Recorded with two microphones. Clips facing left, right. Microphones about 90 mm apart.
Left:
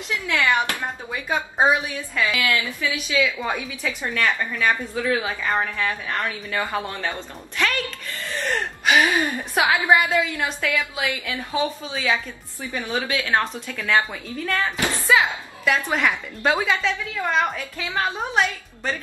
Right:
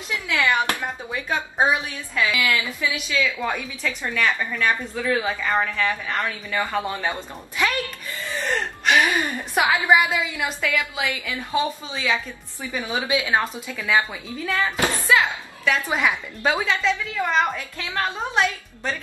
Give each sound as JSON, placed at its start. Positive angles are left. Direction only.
{"t": 0.7, "sound": "speech", "side_deg": 15}
{"t": 2.4, "sound": "a woman's voice", "side_deg": -20}
{"t": 3.1, "sound": "a woman's voice", "side_deg": 15}
{"t": 7.0, "sound": "a woman's voice", "side_deg": -15}
{"t": 8.3, "sound": "a woman's voice", "side_deg": 0}
{"t": 12.7, "sound": "a woman's voice", "side_deg": -15}
{"t": 15.0, "sound": "a sound", "side_deg": 5}
{"t": 15.9, "sound": "a woman's voice", "side_deg": -10}
{"t": 16.4, "sound": "a woman's voice", "side_deg": 0}